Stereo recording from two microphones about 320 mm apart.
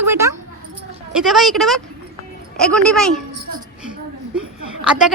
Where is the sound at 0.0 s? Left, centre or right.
Centre.